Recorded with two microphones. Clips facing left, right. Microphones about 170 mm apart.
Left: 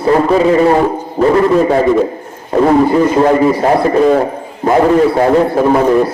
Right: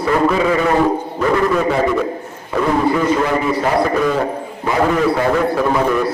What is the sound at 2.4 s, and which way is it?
A man's voice, 30° left (ahead or behind).